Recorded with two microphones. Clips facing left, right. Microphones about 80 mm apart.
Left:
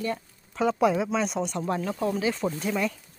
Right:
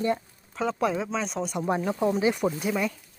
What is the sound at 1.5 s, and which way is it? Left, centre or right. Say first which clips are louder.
Speech: right 2 dB; centre.